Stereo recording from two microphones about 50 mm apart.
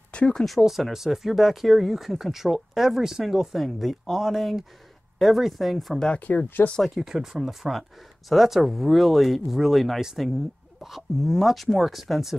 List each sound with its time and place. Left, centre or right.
0.1 s a sound: left
0.5 s speech: centre
6.1 s speech: left
7.0 s speech: centre